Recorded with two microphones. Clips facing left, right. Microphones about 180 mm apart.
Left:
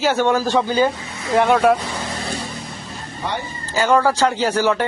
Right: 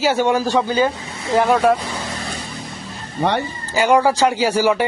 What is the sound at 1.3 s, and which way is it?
Speech, centre (ahead or behind).